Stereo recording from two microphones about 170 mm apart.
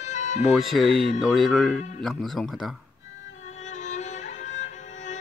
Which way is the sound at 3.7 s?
45° left (ahead or behind).